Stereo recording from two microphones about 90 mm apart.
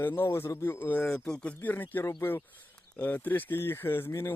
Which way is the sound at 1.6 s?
20° left (ahead or behind).